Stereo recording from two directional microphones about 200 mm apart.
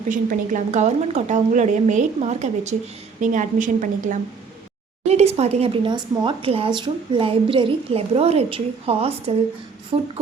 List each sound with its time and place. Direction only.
0.1 s speech: 40° right (ahead or behind)